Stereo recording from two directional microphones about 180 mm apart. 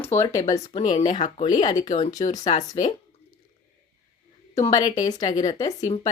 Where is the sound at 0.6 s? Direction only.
35° left (ahead or behind).